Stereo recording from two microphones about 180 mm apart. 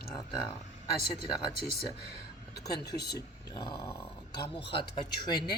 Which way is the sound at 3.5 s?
20° left (ahead or behind).